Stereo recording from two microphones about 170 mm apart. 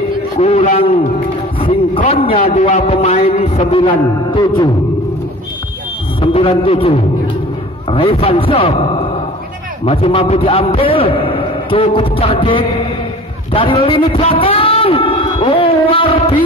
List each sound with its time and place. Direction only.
0.4 s a man's voice: 40° left (ahead or behind)
6.2 s a man's voice: 30° left (ahead or behind)
7.9 s a man's voice: 35° left (ahead or behind)
13.5 s a sound: 30° left (ahead or behind)